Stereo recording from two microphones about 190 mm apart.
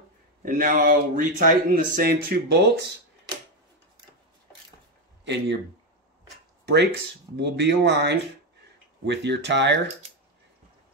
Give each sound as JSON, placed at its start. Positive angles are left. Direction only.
{"t": 0.5, "sound": "speech", "side_deg": -45}
{"t": 5.2, "sound": "speech", "side_deg": -65}
{"t": 6.6, "sound": "speech", "side_deg": -65}